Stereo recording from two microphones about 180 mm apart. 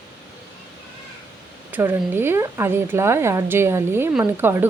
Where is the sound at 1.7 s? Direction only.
10° right (ahead or behind).